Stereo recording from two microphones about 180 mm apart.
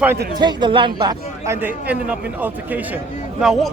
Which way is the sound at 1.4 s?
15° right (ahead or behind).